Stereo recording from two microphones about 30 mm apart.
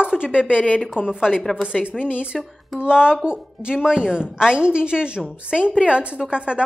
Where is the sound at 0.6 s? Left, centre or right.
Left.